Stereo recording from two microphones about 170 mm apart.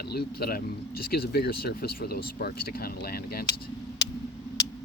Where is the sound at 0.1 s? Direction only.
65° left (ahead or behind).